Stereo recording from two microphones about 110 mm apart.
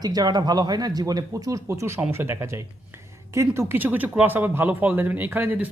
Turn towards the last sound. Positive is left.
turn(degrees=-20)  # may be behind; listen again after turning